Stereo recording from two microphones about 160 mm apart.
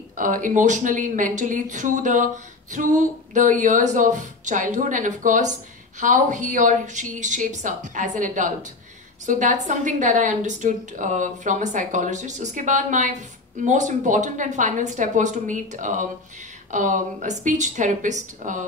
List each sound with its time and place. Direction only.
0.1 s speech: 55° right (ahead or behind)